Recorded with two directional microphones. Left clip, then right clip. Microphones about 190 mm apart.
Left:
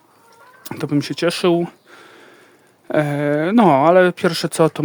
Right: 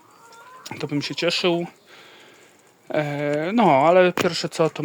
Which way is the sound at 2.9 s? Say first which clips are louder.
Left 5 dB; 45° left (ahead or behind).